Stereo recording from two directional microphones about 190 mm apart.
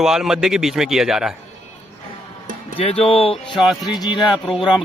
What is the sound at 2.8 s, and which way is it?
Speech, 30° left (ahead or behind).